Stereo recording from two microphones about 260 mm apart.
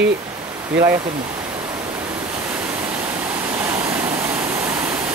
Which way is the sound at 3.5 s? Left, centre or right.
Centre.